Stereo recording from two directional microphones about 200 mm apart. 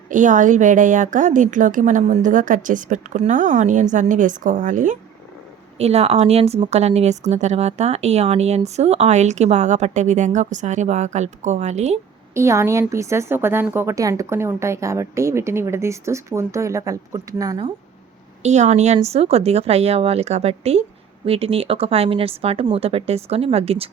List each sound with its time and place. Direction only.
0.1 s speech: 40° right (ahead or behind)
12.3 s a woman's voice: 15° right (ahead or behind)
18.4 s speech: 35° right (ahead or behind)